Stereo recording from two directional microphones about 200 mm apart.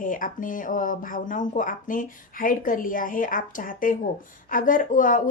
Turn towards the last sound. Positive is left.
turn(degrees=40)  # may be behind; listen again after turning